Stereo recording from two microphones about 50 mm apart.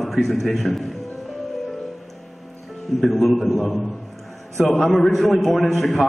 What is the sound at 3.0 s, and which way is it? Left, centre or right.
Speech, centre.